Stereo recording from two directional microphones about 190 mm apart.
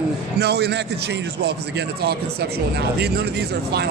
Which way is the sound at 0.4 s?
60° right (ahead or behind).